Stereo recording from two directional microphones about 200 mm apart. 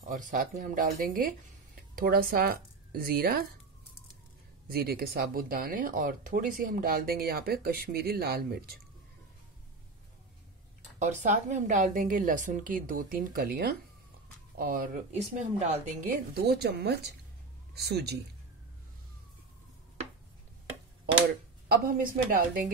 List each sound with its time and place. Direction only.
0.0 s a woman's voice: 40° right (ahead or behind)
4.6 s speech: 50° right (ahead or behind)
11.0 s a woman's voice: 35° right (ahead or behind); by 18.1 s 55° right (ahead or behind)
21.6 s speech: 50° right (ahead or behind)